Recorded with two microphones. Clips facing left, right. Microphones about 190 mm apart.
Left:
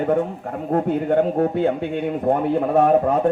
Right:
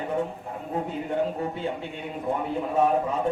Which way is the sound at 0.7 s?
65° left (ahead or behind).